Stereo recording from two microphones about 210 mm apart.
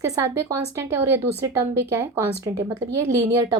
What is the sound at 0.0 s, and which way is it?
A woman's voice, 15° right (ahead or behind).